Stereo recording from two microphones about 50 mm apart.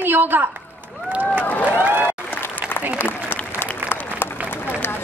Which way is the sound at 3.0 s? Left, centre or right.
Left.